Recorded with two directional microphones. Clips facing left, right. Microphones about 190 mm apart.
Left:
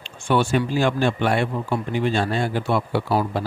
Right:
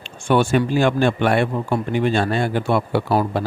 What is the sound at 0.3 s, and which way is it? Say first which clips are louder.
Speech: right 3 dB; 50° right (ahead or behind).